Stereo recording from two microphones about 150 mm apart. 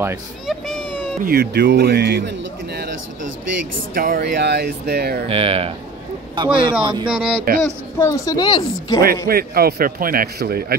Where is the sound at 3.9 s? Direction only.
70° right (ahead or behind); by 5.2 s 90° right.